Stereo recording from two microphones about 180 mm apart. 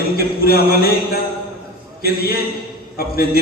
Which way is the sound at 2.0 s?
60° left (ahead or behind).